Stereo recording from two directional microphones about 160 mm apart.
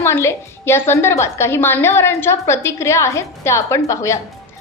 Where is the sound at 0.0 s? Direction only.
15° left (ahead or behind).